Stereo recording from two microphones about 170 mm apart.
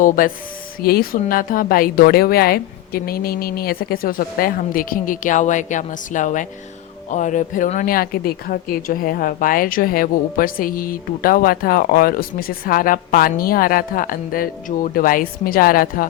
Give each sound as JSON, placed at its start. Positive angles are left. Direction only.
{"t": 0.2, "sound": "speech", "side_deg": 55}